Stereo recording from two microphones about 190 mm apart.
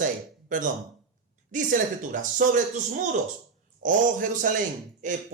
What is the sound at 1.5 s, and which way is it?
Speech, 40° right (ahead or behind).